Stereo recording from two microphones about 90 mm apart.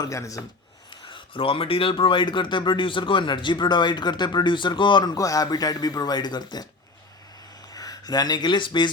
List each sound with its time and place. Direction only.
0.0 s speech: 35° left (ahead or behind)
1.0 s speech: 70° left (ahead or behind)
5.1 s speech: 40° left (ahead or behind)
7.7 s speech: 45° left (ahead or behind)